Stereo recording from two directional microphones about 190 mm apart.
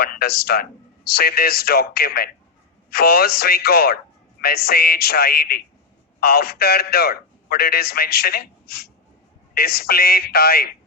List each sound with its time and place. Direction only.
0.0 s a man's voice: 55° left (ahead or behind)